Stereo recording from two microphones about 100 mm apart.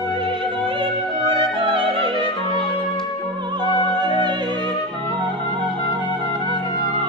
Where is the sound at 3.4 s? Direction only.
45° right (ahead or behind).